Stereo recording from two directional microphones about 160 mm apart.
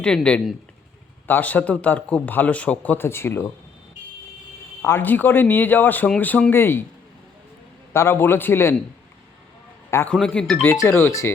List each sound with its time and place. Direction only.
0.0 s a man's voice: 5° left (ahead or behind)
4.8 s a man's voice: 15° left (ahead or behind)
7.9 s a man's voice: 15° left (ahead or behind)
9.9 s a man's voice: 10° left (ahead or behind)